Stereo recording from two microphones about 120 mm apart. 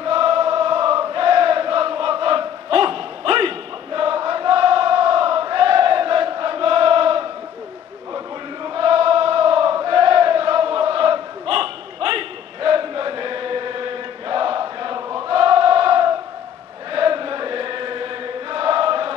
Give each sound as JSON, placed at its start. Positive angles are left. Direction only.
{"t": 0.0, "sound": "chant", "side_deg": -50}
{"t": 2.7, "sound": "a sound", "side_deg": -50}
{"t": 8.6, "sound": "chant", "side_deg": -50}
{"t": 15.1, "sound": "choir", "side_deg": -45}
{"t": 16.9, "sound": "chant", "side_deg": -45}